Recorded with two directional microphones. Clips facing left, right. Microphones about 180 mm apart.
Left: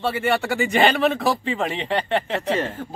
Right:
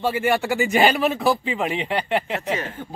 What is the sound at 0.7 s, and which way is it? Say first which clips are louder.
A man's voice: left 1 dB; 5° right (ahead or behind).